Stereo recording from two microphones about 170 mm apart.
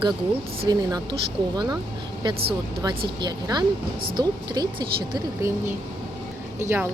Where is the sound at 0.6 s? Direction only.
25° right (ahead or behind).